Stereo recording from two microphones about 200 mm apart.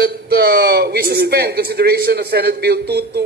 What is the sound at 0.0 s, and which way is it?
A man's voice, 50° right (ahead or behind).